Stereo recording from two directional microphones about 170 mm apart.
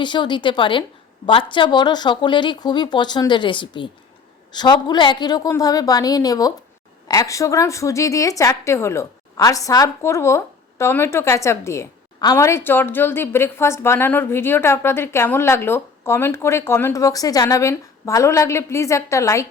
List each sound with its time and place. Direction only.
0.0 s a woman's voice: 25° left (ahead or behind)